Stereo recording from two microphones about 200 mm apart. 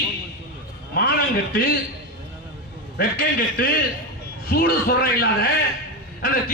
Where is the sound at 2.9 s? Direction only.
50° left (ahead or behind).